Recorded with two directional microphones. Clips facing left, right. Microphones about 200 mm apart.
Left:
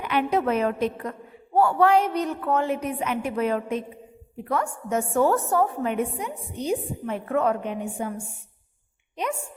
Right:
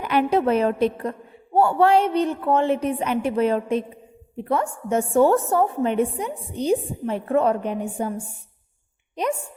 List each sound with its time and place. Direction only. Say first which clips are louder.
0.0 s a woman's voice: right 4 dB; 40° right (ahead or behind)